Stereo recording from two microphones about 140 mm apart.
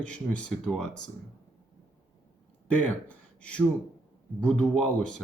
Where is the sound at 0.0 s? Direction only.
10° left (ahead or behind).